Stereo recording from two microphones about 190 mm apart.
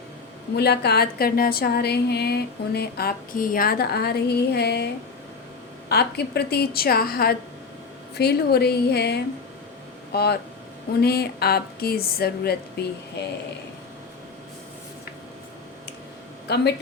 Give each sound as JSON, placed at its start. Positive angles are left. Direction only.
{"t": 0.5, "sound": "a woman's voice", "side_deg": 60}
{"t": 5.9, "sound": "a woman's voice", "side_deg": 60}